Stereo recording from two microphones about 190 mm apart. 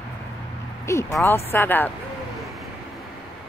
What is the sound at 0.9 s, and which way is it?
Speech, 15° left (ahead or behind).